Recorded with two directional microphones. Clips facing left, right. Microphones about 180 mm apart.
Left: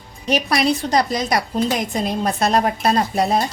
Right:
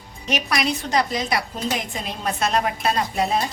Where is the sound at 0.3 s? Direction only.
35° left (ahead or behind).